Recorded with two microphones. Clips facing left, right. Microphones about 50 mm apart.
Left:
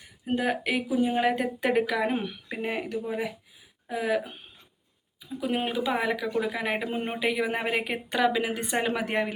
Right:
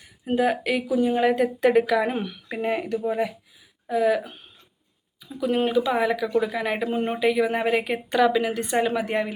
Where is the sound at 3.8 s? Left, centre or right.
Centre.